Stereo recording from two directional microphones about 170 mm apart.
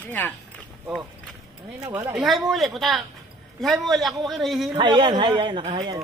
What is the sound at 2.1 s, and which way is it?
A man's voice, centre (ahead or behind).